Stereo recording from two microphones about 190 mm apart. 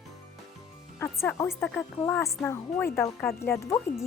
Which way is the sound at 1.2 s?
15° left (ahead or behind).